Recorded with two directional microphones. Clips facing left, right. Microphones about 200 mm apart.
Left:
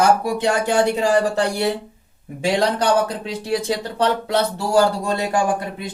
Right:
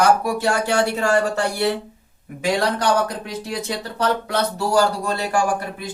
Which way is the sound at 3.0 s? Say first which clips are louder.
Left 2 dB; 30° left (ahead or behind).